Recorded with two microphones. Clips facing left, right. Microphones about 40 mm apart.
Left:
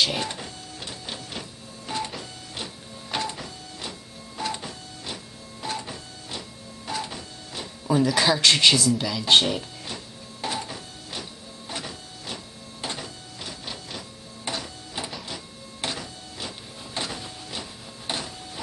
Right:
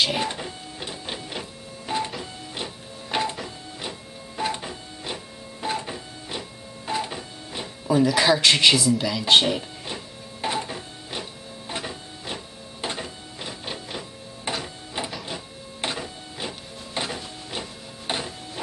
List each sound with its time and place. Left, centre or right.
0.0 s printer: centre
4.4 s printer: right
7.8 s speech: centre
9.3 s printer: centre